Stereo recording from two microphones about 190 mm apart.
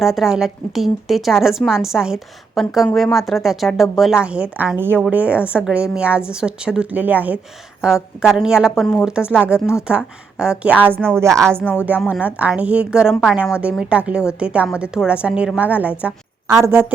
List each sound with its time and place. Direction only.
0.0 s a woman's voice: centre (ahead or behind)
12.0 s a woman's voice: 5° right (ahead or behind)